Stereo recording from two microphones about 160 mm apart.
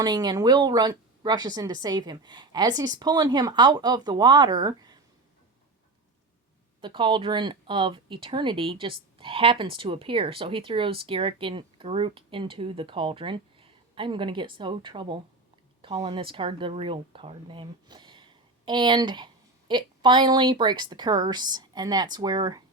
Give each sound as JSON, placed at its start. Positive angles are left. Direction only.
{"t": 0.0, "sound": "a woman's voice", "side_deg": -25}
{"t": 6.8, "sound": "speech", "side_deg": -30}